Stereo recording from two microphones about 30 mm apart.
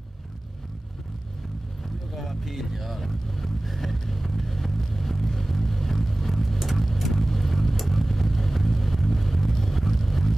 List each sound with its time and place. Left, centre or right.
2.1 s vehicle: centre